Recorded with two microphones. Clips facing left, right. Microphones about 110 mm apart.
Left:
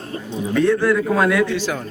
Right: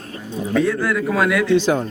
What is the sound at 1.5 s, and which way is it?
Speech, 25° right (ahead or behind).